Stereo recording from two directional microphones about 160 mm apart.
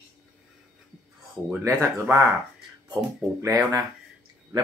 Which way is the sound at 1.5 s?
10° right (ahead or behind).